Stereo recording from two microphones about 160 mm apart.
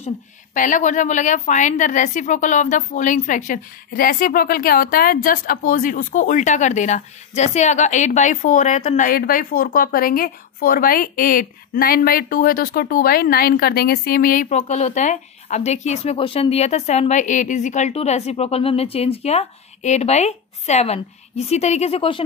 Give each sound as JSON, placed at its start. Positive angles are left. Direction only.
{"t": 0.6, "sound": "a woman's voice", "side_deg": 50}